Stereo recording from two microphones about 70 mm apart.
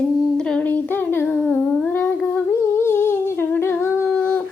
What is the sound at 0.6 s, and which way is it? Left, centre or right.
Child singing, left.